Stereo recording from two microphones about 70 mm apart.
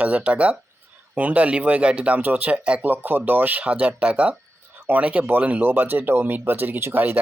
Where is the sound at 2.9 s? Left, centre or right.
Right.